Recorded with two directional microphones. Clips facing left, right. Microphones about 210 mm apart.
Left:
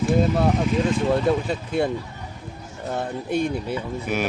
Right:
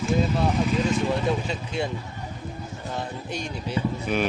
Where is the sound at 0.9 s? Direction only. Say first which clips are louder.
Left 4 dB; 55° left (ahead or behind).